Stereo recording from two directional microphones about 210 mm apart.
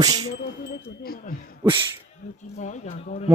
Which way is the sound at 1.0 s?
45° left (ahead or behind).